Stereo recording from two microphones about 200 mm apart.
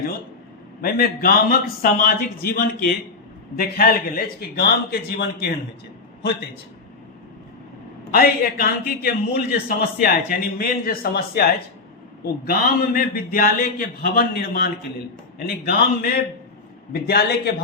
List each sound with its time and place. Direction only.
0.8 s a man's voice: 50° left (ahead or behind)
8.1 s a man's voice: 50° left (ahead or behind)